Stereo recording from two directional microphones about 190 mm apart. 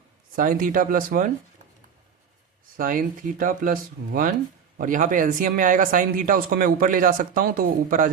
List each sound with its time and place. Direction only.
0.3 s speech: 45° right (ahead or behind)
2.7 s speech: 45° right (ahead or behind)